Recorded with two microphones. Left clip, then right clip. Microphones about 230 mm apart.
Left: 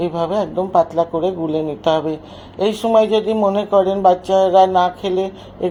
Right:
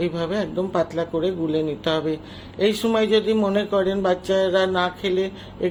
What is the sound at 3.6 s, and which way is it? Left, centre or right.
Speech, right.